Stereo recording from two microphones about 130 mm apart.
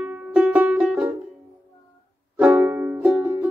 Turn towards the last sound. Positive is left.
turn(degrees=-15)  # may be behind; listen again after turning